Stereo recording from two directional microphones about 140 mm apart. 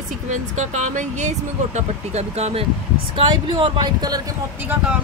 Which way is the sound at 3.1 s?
35° right (ahead or behind).